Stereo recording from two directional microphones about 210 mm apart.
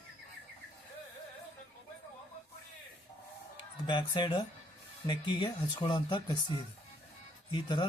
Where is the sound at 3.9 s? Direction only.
20° left (ahead or behind).